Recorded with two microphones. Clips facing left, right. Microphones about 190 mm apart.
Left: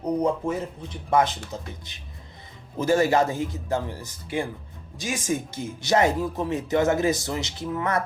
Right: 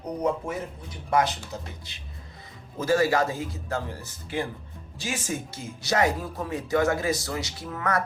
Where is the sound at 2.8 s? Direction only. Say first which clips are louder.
Left 2 dB; 20° left (ahead or behind).